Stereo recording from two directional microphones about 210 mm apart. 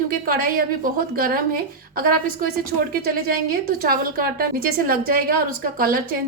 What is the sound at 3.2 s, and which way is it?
A woman's voice, 45° right (ahead or behind).